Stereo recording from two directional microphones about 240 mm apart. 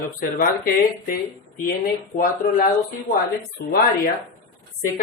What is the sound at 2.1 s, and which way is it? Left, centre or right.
Speech, left.